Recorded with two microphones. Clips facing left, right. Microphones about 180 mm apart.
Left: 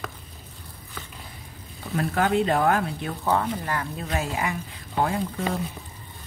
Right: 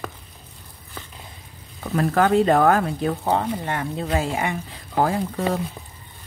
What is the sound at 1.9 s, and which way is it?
Speech, 45° right (ahead or behind).